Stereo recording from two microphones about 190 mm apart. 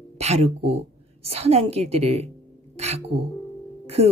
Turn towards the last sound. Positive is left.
turn(degrees=-30)  # may be behind; listen again after turning